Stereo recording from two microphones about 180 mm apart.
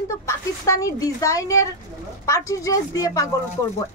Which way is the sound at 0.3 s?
15° left (ahead or behind).